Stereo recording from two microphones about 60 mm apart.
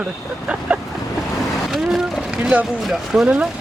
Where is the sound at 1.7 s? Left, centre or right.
Centre.